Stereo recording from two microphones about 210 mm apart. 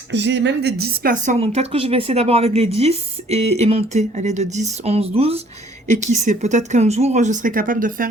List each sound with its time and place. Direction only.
0.1 s a woman's voice: 55° right (ahead or behind)